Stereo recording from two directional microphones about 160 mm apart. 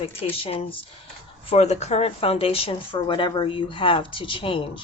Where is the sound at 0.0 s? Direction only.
35° left (ahead or behind).